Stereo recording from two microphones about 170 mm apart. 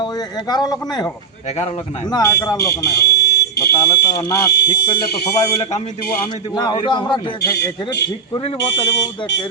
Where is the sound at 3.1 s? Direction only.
75° left (ahead or behind).